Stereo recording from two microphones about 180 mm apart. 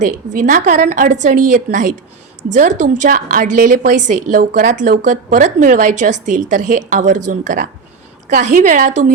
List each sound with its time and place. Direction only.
0.3 s a woman's voice: 45° right (ahead or behind)